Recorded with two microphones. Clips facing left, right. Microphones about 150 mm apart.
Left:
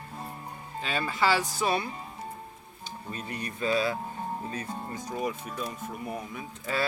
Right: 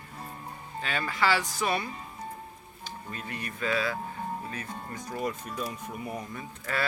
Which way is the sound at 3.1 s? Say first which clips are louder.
Left 3 dB; 20° left (ahead or behind).